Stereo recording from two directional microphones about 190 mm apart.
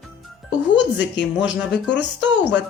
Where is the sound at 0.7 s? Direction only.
70° left (ahead or behind).